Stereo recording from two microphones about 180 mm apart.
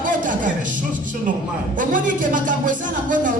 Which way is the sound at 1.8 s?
45° right (ahead or behind).